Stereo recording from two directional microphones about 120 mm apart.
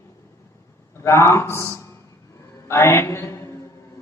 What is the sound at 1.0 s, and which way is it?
A man's voice, 25° left (ahead or behind).